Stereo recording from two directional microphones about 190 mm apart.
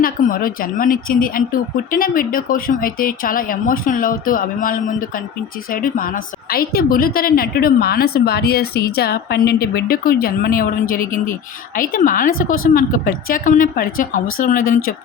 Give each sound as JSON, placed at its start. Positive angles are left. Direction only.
{"t": 0.0, "sound": "a woman's voice", "side_deg": 50}